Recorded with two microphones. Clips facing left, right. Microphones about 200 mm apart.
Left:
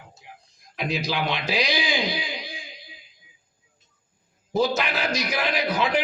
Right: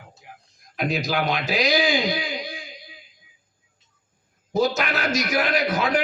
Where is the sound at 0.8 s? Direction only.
50° right (ahead or behind).